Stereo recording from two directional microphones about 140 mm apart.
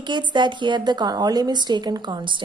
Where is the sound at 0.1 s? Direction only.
35° right (ahead or behind).